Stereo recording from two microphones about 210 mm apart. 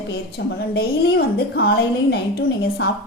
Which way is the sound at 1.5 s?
50° left (ahead or behind).